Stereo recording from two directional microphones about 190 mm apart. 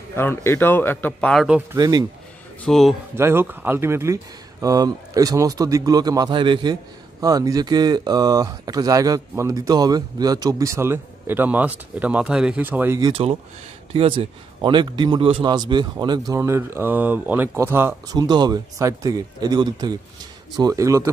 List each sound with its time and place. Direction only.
0.1 s a man's voice: 10° left (ahead or behind)
1.7 s speech: 20° right (ahead or behind)
2.6 s speech: centre (ahead or behind)
3.2 s speech: 10° right (ahead or behind)
13.1 s speech: 30° right (ahead or behind)